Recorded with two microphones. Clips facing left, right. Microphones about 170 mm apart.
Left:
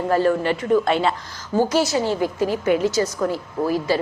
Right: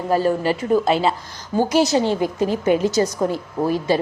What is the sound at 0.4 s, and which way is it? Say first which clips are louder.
Speech: right 1 dB; 35° right (ahead or behind).